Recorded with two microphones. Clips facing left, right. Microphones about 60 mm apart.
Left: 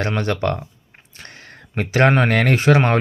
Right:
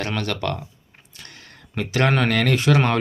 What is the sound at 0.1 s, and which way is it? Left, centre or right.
Speech, left.